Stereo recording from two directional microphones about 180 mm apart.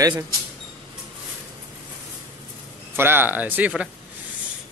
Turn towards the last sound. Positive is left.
turn(degrees=-10)  # may be behind; listen again after turning